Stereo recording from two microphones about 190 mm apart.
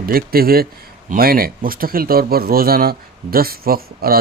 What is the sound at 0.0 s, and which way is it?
Speech, 50° right (ahead or behind).